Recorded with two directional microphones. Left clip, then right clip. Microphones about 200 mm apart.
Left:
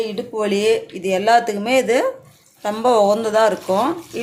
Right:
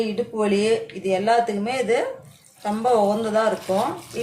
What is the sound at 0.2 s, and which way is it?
Speech, 40° left (ahead or behind).